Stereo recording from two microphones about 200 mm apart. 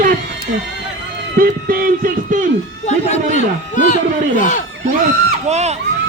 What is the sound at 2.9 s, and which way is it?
A man's voice, 35° left (ahead or behind).